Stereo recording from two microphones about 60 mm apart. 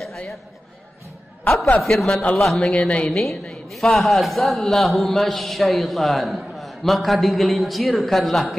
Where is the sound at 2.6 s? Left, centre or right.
Centre.